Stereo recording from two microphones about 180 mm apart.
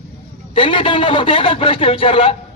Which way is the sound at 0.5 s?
30° left (ahead or behind).